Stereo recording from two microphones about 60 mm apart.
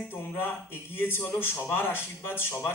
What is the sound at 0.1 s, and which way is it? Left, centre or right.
A man's voice, left.